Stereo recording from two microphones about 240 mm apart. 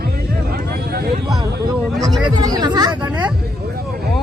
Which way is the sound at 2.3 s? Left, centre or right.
Centre.